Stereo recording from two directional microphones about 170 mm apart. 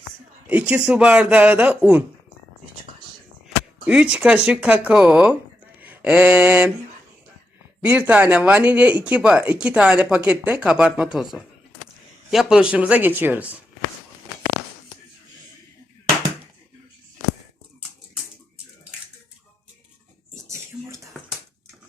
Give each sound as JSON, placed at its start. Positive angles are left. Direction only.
{"t": 0.4, "sound": "speech", "side_deg": -10}
{"t": 3.8, "sound": "speech", "side_deg": -5}
{"t": 5.8, "sound": "mantra", "side_deg": -10}
{"t": 7.8, "sound": "speech", "side_deg": -10}
{"t": 20.3, "sound": "a sound", "side_deg": -15}